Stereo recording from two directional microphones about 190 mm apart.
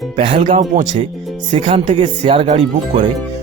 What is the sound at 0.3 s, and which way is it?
Speech, 40° right (ahead or behind).